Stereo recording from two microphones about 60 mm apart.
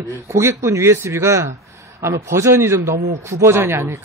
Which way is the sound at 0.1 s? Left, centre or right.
Right.